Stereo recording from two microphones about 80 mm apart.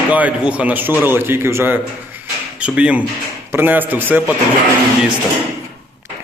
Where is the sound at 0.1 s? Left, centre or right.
Centre.